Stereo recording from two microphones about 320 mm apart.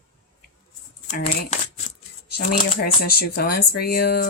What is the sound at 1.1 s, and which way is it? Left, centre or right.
Speech, left.